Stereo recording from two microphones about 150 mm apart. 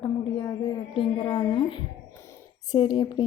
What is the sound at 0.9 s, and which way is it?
A woman's voice, 35° left (ahead or behind).